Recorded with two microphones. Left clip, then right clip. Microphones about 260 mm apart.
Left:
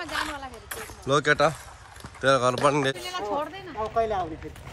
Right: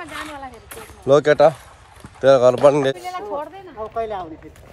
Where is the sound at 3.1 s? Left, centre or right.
Centre.